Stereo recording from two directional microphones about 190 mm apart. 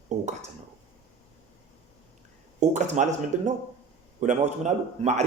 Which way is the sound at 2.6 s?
40° right (ahead or behind).